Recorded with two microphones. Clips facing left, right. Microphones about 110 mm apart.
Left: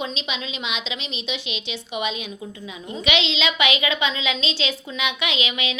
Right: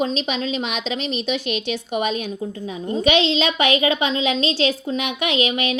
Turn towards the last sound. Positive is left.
turn(degrees=-45)  # may be behind; listen again after turning